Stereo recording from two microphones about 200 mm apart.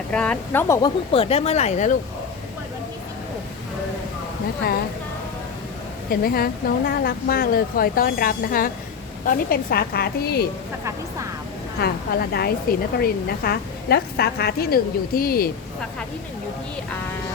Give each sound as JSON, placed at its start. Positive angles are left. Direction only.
{"t": 0.1, "sound": "speech", "side_deg": 5}
{"t": 0.8, "sound": "speech", "side_deg": 30}
{"t": 6.1, "sound": "speech", "side_deg": 45}
{"t": 11.8, "sound": "speech", "side_deg": 50}